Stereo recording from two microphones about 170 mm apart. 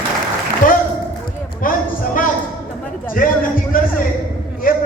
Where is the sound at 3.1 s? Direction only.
55° left (ahead or behind).